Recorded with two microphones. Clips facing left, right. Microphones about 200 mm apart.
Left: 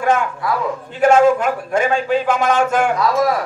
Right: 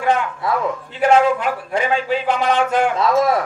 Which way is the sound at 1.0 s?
45° left (ahead or behind).